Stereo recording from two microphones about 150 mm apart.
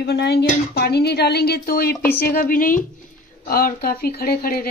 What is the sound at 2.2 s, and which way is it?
Speech, 75° left (ahead or behind).